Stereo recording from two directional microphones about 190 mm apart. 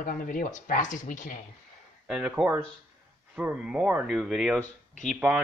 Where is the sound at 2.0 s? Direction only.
5° right (ahead or behind).